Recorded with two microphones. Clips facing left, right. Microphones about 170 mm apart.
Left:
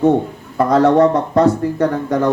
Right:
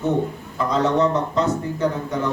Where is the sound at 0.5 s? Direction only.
60° left (ahead or behind).